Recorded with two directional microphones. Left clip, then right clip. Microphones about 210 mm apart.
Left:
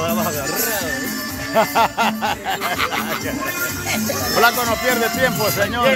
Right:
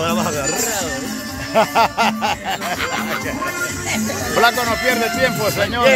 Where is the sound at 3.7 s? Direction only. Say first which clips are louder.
Even; 45° left (ahead or behind).